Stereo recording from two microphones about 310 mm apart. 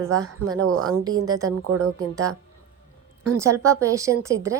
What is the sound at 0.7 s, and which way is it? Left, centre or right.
Speech, right.